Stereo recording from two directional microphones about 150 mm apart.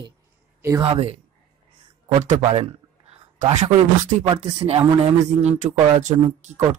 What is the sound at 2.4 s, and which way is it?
Speech, 40° right (ahead or behind).